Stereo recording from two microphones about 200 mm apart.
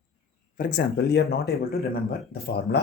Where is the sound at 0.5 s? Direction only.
45° left (ahead or behind).